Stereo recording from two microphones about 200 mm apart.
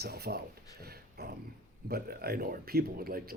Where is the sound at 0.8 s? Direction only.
50° right (ahead or behind).